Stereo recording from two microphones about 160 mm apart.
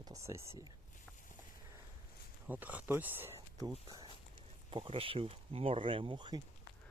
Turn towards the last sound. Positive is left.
turn(degrees=-30)  # may be behind; listen again after turning